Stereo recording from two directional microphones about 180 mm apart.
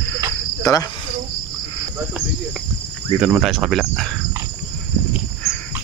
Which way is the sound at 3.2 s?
5° right (ahead or behind).